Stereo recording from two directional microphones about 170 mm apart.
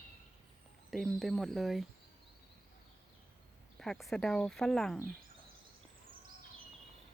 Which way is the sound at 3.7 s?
5° left (ahead or behind).